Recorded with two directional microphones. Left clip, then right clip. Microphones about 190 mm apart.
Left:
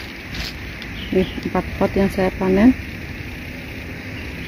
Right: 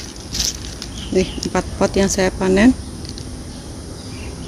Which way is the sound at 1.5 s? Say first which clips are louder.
Right 2 dB; 15° right (ahead or behind).